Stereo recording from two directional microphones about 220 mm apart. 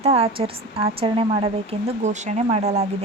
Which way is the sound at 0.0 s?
30° right (ahead or behind).